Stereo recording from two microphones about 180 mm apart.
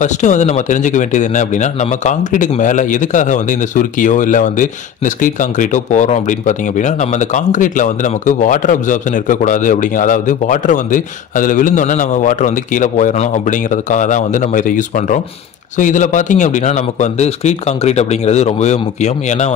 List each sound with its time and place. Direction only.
0.0 s speech: 40° left (ahead or behind)